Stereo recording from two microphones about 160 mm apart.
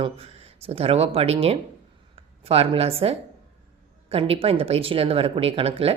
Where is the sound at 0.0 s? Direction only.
40° right (ahead or behind).